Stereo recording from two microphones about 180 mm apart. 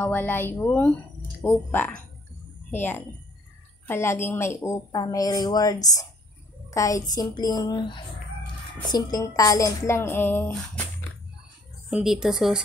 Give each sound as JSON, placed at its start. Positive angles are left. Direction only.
{"t": 0.0, "sound": "a woman's voice", "side_deg": 10}
{"t": 11.9, "sound": "speech", "side_deg": -5}